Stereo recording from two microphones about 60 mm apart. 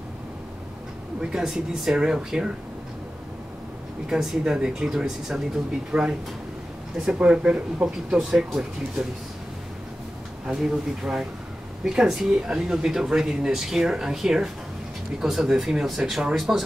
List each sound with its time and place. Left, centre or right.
1.2 s speech: centre
4.1 s speech: centre
7.2 s speech: centre
10.4 s speech: centre